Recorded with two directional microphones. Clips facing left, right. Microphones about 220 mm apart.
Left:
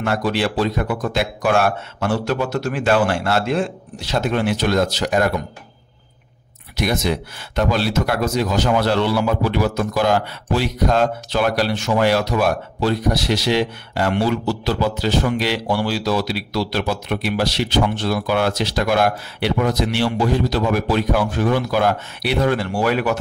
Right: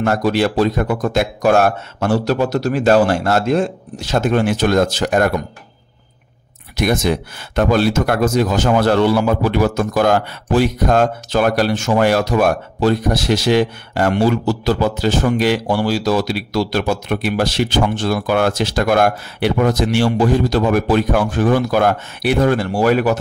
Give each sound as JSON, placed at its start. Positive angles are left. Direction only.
{"t": 0.0, "sound": "speech", "side_deg": -45}
{"t": 6.8, "sound": "speech", "side_deg": -50}